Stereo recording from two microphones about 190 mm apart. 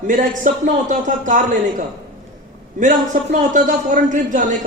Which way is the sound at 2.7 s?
45° right (ahead or behind).